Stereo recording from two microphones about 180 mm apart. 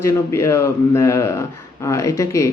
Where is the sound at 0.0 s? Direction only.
15° left (ahead or behind).